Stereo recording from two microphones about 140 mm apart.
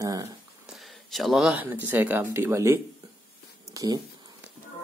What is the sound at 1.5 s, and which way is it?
Speech, 15° right (ahead or behind).